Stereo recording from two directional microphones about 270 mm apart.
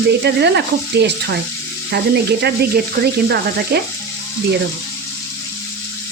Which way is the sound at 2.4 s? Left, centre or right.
Right.